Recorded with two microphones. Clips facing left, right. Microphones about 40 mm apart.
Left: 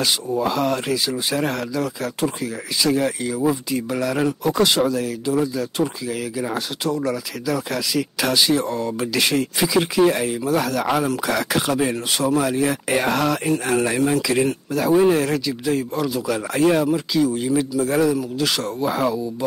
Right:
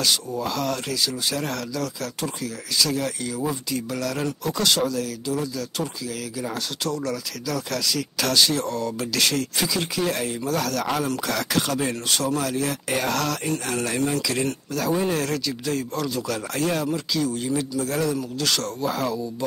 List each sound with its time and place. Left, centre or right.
0.0 s speech: left